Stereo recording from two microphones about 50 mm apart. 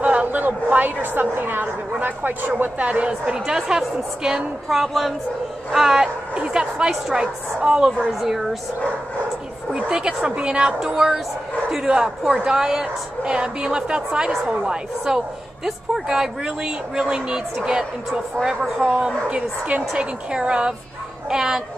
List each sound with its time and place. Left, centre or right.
0.0 s a sound: right
1.0 s speech: right
2.8 s a woman's voice: right
8.2 s speech: centre
9.8 s a woman's voice: centre